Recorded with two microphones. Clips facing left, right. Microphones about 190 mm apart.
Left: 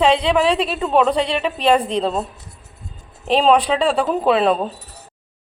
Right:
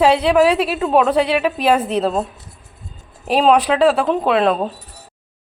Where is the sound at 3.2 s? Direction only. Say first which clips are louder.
Right 1 dB; 10° right (ahead or behind).